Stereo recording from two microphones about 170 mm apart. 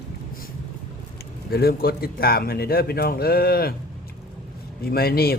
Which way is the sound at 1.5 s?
65° left (ahead or behind).